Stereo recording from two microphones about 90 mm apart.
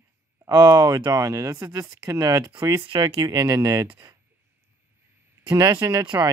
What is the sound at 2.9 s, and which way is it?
Speech, 60° right (ahead or behind).